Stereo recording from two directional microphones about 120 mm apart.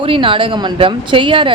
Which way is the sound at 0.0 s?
45° right (ahead or behind).